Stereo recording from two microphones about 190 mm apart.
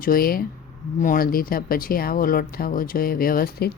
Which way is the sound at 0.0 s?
50° left (ahead or behind).